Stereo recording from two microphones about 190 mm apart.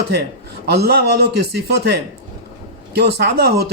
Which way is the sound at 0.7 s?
55° right (ahead or behind).